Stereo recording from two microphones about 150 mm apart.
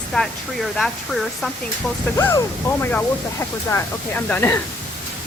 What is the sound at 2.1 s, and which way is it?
Speech, 15° left (ahead or behind).